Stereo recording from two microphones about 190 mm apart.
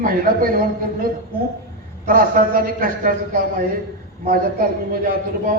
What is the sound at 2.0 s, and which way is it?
A man's voice, 45° right (ahead or behind).